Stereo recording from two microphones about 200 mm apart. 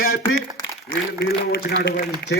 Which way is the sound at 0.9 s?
55° left (ahead or behind).